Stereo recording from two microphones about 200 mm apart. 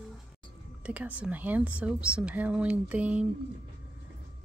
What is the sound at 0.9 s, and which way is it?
Speech, 5° right (ahead or behind).